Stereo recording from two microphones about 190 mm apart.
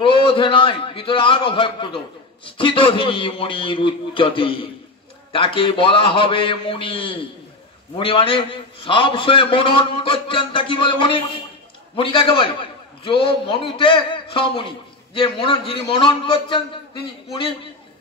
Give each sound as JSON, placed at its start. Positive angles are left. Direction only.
{"t": 0.0, "sound": "a man's voice", "side_deg": 30}